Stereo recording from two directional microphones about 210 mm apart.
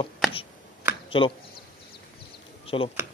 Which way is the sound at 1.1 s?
25° left (ahead or behind).